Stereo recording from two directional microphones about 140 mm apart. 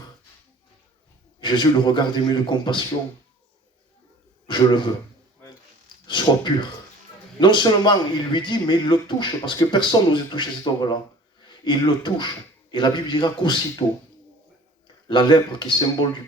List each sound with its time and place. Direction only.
1.4 s a man's voice: 35° left (ahead or behind)
4.4 s speech: 35° left (ahead or behind)
6.1 s a man's voice: 35° left (ahead or behind)
15.0 s a man's voice: 35° left (ahead or behind)